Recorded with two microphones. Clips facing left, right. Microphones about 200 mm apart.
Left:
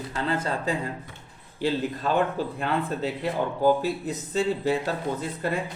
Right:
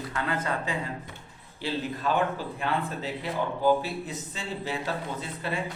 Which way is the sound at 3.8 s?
40° left (ahead or behind).